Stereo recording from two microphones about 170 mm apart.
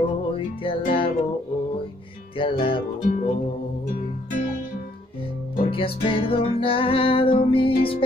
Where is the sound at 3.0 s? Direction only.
50° left (ahead or behind).